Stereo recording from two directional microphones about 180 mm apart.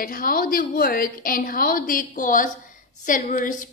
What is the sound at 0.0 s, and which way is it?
A woman's voice, 55° left (ahead or behind).